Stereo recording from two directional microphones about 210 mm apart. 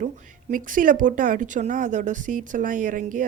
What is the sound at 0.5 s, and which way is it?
A woman's voice, 40° right (ahead or behind).